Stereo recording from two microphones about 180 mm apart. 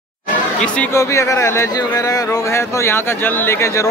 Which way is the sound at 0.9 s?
15° left (ahead or behind).